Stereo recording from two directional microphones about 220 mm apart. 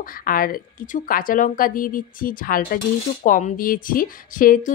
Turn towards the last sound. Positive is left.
turn(degrees=40)  # may be behind; listen again after turning